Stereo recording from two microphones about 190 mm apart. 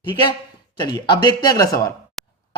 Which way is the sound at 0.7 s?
25° left (ahead or behind).